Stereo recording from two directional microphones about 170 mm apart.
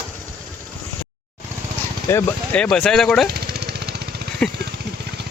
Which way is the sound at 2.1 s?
10° left (ahead or behind).